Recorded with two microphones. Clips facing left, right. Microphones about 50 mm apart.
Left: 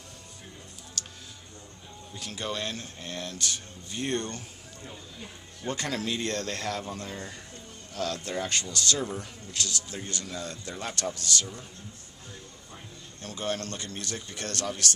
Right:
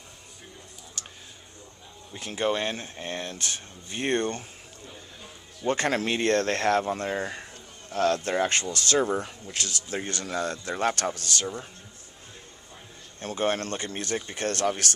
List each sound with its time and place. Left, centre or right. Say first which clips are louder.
1.0 s a sound: left 2 dB; right
2.1 s speech: right 7 dB; right
5.7 s speech: right 6 dB; right
13.2 s speech: right 6 dB; right